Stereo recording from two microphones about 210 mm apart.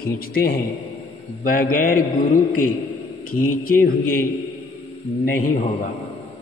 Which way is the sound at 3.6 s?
45° left (ahead or behind).